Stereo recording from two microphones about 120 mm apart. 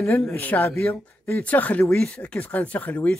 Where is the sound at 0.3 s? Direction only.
15° left (ahead or behind).